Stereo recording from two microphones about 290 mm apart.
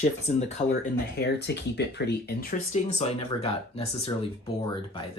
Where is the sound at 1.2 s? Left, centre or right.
Left; by 4.3 s centre.